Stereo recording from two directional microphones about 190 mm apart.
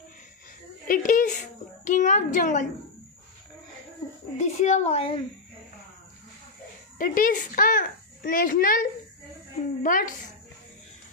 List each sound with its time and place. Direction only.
0.8 s a child's voice: 45° left (ahead or behind)
4.4 s a woman's voice: 40° left (ahead or behind)
7.0 s a child's voice: 45° left (ahead or behind)
9.8 s a child's voice: 45° left (ahead or behind)